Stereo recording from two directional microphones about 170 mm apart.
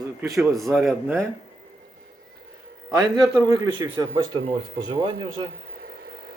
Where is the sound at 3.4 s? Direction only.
20° right (ahead or behind).